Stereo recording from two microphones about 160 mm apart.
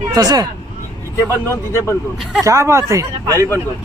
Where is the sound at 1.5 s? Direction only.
15° left (ahead or behind).